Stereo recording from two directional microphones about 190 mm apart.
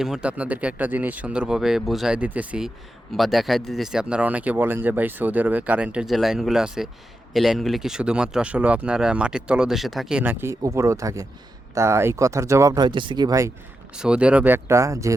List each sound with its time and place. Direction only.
0.0 s speech: 5° right (ahead or behind)
13.9 s speech: 5° right (ahead or behind)